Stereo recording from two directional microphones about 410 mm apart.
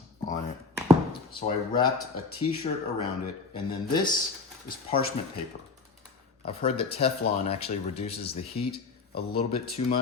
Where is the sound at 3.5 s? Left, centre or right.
Centre.